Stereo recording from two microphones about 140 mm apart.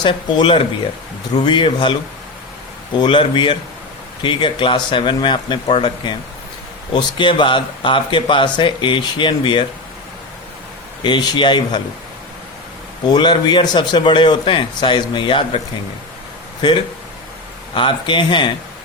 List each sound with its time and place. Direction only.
0.0 s speech: 35° left (ahead or behind)
11.0 s speech: 30° left (ahead or behind)
13.1 s speech: 30° left (ahead or behind)
17.7 s speech: 35° left (ahead or behind)